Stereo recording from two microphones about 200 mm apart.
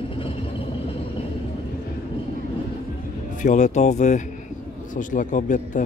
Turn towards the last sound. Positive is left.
turn(degrees=40)  # may be behind; listen again after turning